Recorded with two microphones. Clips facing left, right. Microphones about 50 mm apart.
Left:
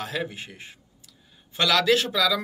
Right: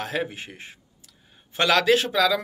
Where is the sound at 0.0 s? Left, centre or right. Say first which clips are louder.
Right 2 dB; right.